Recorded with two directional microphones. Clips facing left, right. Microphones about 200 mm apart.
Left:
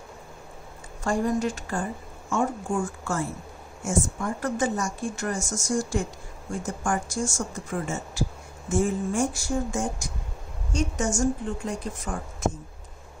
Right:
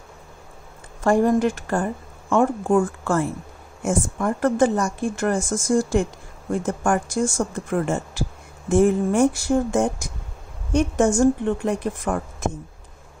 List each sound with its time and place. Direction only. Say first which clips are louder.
1.0 s speech: right 7 dB; 55° right (ahead or behind)